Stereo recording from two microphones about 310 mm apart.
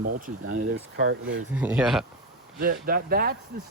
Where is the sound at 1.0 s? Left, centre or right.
Right.